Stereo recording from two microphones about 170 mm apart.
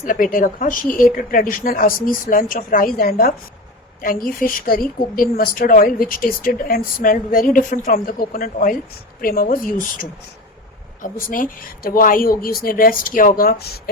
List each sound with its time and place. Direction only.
0.0 s a woman's voice: 55° left (ahead or behind)